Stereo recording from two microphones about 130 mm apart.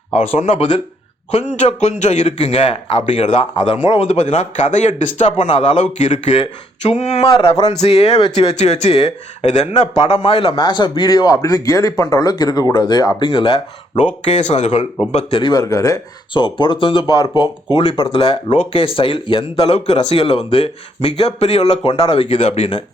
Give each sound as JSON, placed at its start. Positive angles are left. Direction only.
{"t": 0.3, "sound": "a man's voice", "side_deg": 45}
{"t": 1.3, "sound": "a man's voice", "side_deg": 60}
{"t": 4.0, "sound": "a man's voice", "side_deg": 60}
{"t": 8.5, "sound": "a man's voice", "side_deg": 60}
{"t": 14.0, "sound": "a man's voice", "side_deg": 60}
{"t": 15.4, "sound": "a man's voice", "side_deg": 30}